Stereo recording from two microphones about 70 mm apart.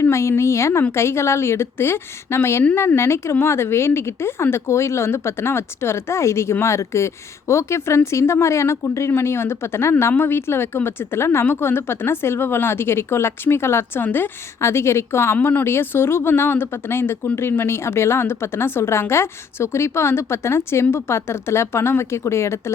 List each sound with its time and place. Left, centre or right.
0.0 s a woman's voice: left